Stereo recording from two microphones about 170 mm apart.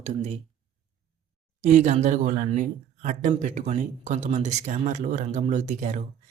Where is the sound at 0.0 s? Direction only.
40° right (ahead or behind).